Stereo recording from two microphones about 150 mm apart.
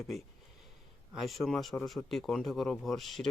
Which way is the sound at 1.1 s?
Centre (ahead or behind).